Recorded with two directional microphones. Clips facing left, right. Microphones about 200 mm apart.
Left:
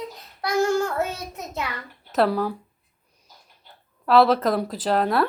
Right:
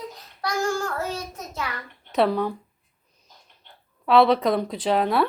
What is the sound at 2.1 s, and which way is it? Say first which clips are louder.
Speech: even; 5° left (ahead or behind).